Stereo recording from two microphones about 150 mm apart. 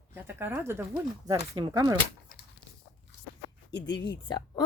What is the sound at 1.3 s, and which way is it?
Speech, 25° right (ahead or behind).